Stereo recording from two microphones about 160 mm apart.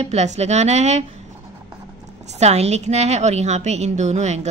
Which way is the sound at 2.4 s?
40° right (ahead or behind).